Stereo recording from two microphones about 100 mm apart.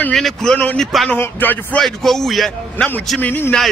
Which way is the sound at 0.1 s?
5° left (ahead or behind).